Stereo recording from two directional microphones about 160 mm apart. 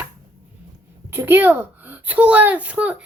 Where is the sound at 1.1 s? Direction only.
15° right (ahead or behind).